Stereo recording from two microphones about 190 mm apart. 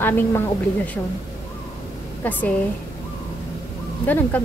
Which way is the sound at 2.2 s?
10° left (ahead or behind).